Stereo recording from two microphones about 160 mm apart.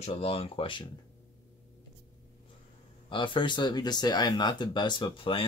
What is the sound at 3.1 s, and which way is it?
Speech, 30° left (ahead or behind).